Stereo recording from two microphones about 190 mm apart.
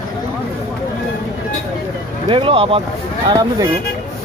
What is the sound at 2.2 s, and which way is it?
Speech, 30° right (ahead or behind).